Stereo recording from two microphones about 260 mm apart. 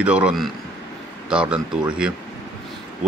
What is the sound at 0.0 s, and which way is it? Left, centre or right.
Speech, centre.